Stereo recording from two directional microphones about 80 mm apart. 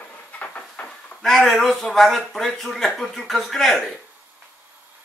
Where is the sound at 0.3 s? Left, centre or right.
Centre.